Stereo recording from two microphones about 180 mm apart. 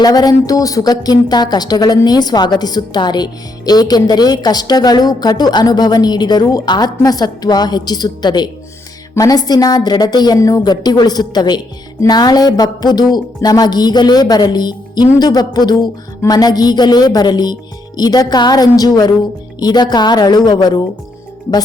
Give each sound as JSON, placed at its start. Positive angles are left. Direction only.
{"t": 0.0, "sound": "a woman's voice", "side_deg": 20}